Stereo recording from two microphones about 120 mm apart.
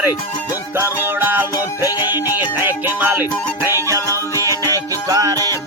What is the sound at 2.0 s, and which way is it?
Music, 15° right (ahead or behind).